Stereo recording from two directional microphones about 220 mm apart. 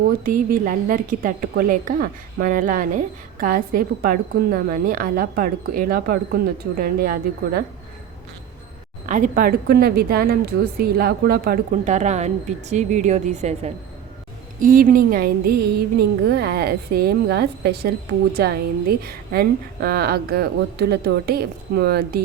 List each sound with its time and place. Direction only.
0.3 s a woman's voice: 40° right (ahead or behind)
9.0 s a woman's voice: 35° right (ahead or behind)